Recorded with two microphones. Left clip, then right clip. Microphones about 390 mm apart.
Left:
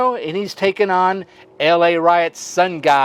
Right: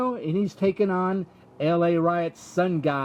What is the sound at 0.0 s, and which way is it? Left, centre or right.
Speech, left.